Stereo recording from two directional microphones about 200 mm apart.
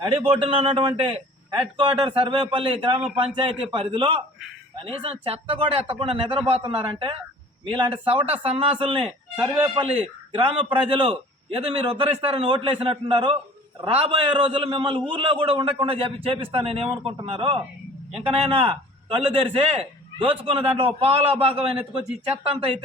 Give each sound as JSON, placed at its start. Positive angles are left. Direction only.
{"t": 0.1, "sound": "a man's voice", "side_deg": -25}
{"t": 1.0, "sound": "a sound", "side_deg": -25}
{"t": 1.7, "sound": "a man's voice", "side_deg": -25}
{"t": 9.3, "sound": "a man's voice", "side_deg": -10}
{"t": 10.3, "sound": "a man's voice", "side_deg": -25}